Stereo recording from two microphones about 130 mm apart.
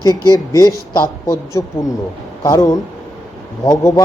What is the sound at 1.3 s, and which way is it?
Speech, 25° left (ahead or behind).